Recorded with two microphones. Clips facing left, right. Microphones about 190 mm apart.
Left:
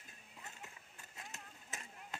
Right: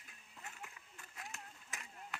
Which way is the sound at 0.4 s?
20° left (ahead or behind).